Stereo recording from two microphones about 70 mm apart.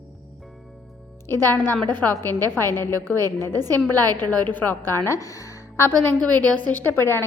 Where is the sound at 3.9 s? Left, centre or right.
Left.